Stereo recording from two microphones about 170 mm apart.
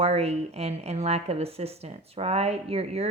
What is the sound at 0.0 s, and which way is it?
Speech, 35° right (ahead or behind).